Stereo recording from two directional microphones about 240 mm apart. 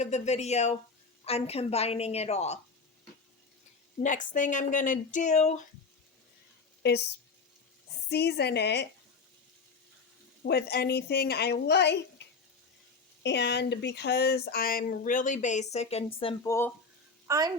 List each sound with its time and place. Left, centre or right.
0.0 s a woman's voice: left
4.0 s speech: left
6.8 s speech: left
8.1 s speech: left
10.4 s a woman's voice: left; by 16.7 s centre
17.2 s a child's voice: centre